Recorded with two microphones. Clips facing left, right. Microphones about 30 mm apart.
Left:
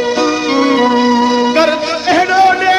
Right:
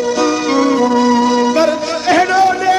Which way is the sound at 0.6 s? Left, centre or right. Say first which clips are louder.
Left 3 dB; left.